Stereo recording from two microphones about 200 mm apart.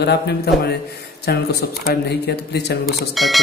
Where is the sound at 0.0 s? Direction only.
55° left (ahead or behind).